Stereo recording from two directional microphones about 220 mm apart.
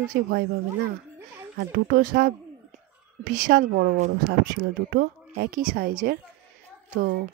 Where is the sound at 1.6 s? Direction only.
45° right (ahead or behind).